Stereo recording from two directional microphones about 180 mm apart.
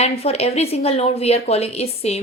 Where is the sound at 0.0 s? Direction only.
35° left (ahead or behind).